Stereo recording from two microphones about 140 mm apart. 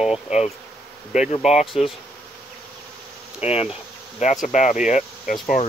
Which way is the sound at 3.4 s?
50° left (ahead or behind).